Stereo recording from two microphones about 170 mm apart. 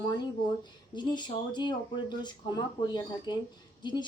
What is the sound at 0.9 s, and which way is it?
Speech, 25° left (ahead or behind).